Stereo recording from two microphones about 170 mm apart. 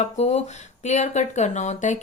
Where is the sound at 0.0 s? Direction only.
40° left (ahead or behind).